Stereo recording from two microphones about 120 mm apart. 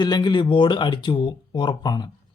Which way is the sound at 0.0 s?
35° left (ahead or behind).